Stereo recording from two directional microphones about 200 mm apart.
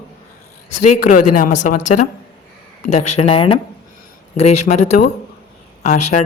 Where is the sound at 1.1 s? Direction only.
40° left (ahead or behind).